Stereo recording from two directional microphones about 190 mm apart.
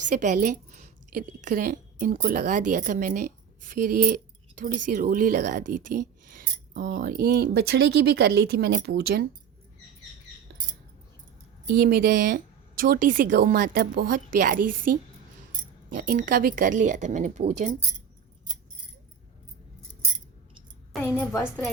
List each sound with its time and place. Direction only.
0.1 s a woman's voice: 40° right (ahead or behind)
11.6 s a woman's voice: 55° right (ahead or behind); by 17.4 s 40° right (ahead or behind)
21.3 s a woman's voice: centre (ahead or behind)